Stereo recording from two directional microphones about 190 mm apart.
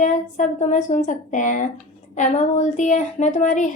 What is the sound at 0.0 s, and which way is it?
A woman's voice, 40° left (ahead or behind).